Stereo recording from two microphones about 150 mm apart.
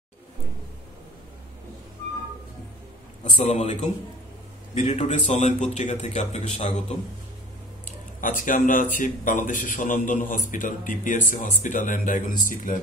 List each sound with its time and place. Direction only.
3.3 s speech: 40° left (ahead or behind)
8.2 s a man's voice: 60° left (ahead or behind)